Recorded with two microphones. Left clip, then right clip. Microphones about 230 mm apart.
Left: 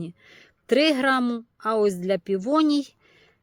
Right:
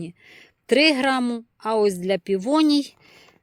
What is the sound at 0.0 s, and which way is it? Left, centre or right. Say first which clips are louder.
A woman's voice: right 1 dB; centre.